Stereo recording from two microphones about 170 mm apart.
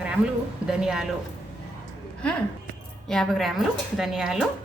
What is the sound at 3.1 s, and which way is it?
A woman's voice, centre (ahead or behind).